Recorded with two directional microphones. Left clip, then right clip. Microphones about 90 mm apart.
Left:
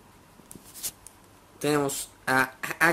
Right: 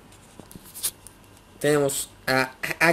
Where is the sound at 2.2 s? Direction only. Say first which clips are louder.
Right 1 dB; 20° left (ahead or behind).